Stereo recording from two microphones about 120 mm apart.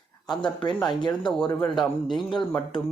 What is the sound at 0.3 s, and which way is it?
Speech, 40° left (ahead or behind).